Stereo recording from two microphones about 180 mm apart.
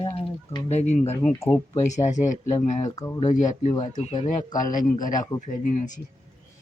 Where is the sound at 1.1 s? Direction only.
10° left (ahead or behind).